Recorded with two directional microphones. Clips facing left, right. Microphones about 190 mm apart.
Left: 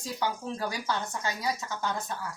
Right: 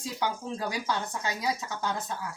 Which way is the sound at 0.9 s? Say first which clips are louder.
Even; 15° right (ahead or behind).